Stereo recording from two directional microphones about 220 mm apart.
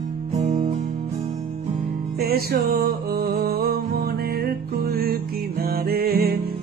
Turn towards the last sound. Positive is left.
turn(degrees=-45)  # may be behind; listen again after turning